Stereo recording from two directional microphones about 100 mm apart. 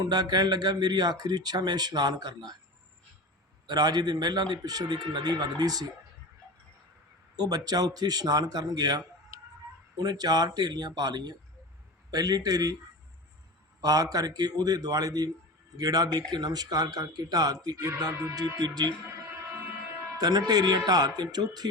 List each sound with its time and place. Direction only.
0.0 s speech: 45° right (ahead or behind)
3.7 s speech: 40° right (ahead or behind)
7.3 s speech: 40° right (ahead or behind)
13.8 s speech: 40° right (ahead or behind)
19.0 s a sound: 20° right (ahead or behind)
20.1 s speech: 40° right (ahead or behind)